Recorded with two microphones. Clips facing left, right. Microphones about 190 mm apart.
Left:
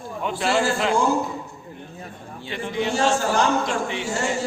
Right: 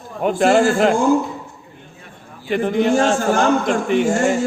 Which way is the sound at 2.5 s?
50° right (ahead or behind).